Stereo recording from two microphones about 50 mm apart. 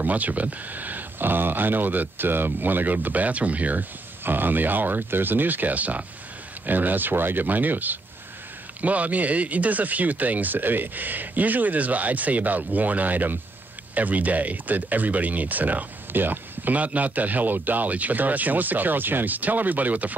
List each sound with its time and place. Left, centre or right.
0.0 s speech: right
4.2 s speech: right